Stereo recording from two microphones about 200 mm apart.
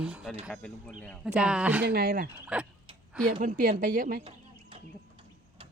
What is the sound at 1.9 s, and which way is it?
Speech, 50° right (ahead or behind).